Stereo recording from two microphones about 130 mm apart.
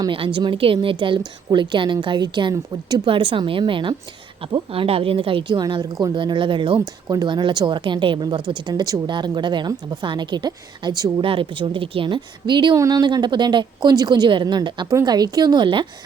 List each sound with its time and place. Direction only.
0.3 s a woman's voice: 40° right (ahead or behind)
11.2 s a woman's voice: 40° right (ahead or behind)